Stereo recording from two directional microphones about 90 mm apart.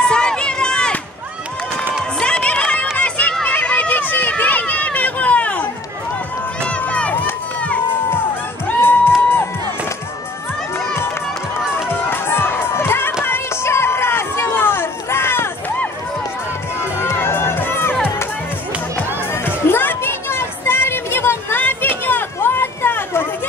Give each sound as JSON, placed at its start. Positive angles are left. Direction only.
{"t": 0.0, "sound": "run", "side_deg": 10}
{"t": 2.1, "sound": "run", "side_deg": 10}
{"t": 3.0, "sound": "a sound", "side_deg": 15}
{"t": 3.4, "sound": "run", "side_deg": 15}
{"t": 6.7, "sound": "crowd", "side_deg": 15}
{"t": 7.6, "sound": "run", "side_deg": 15}
{"t": 8.6, "sound": "music", "side_deg": 25}
{"t": 11.9, "sound": "crowd", "side_deg": 25}
{"t": 13.2, "sound": "run", "side_deg": 25}
{"t": 16.8, "sound": "crowd", "side_deg": 25}
{"t": 19.3, "sound": "music", "side_deg": 25}